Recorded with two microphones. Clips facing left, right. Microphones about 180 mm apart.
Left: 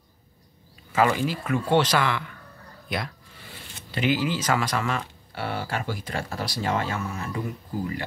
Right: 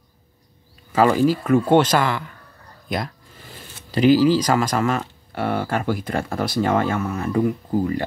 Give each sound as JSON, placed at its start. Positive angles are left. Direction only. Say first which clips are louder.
{"t": 0.9, "sound": "speech", "louder": "right 6 dB", "side_deg": -40}
{"t": 3.5, "sound": "speech", "louder": "right 8 dB", "side_deg": -40}